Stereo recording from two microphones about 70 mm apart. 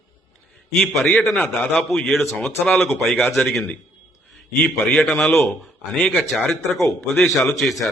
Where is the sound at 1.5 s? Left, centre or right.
Centre.